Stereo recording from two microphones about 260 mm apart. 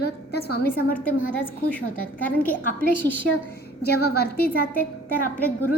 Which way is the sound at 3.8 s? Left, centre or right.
Left.